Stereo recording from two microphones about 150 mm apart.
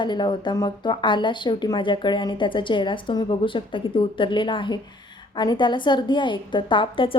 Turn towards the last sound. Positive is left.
turn(degrees=35)  # may be behind; listen again after turning